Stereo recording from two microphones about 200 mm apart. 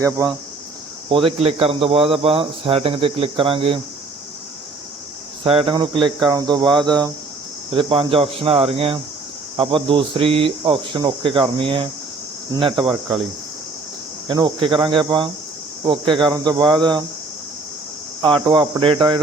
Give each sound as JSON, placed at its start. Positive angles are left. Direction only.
{"t": 0.0, "sound": "speech", "side_deg": -15}
{"t": 1.1, "sound": "speech", "side_deg": -30}
{"t": 5.4, "sound": "speech", "side_deg": -25}
{"t": 14.3, "sound": "speech", "side_deg": -25}
{"t": 18.2, "sound": "speech", "side_deg": -25}